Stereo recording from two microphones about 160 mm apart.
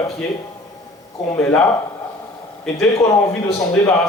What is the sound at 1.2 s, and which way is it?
Speech, 10° left (ahead or behind).